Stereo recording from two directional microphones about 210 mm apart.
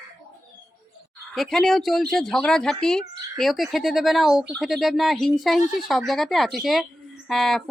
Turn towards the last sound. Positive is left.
turn(degrees=0)  # may be behind; listen again after turning